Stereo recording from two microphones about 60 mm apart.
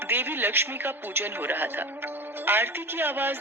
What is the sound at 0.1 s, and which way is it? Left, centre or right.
Speech, right.